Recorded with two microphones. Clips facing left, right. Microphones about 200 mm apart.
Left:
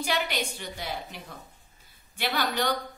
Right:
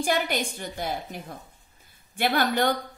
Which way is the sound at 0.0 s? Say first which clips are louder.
Right 4 dB; 50° right (ahead or behind).